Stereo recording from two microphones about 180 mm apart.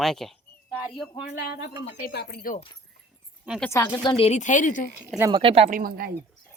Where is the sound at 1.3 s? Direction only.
65° left (ahead or behind).